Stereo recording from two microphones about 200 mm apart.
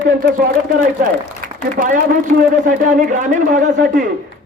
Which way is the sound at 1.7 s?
40° right (ahead or behind).